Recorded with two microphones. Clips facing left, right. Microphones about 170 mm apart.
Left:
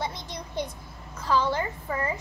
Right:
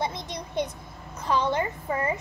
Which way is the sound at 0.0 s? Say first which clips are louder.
Right 3 dB; 20° right (ahead or behind).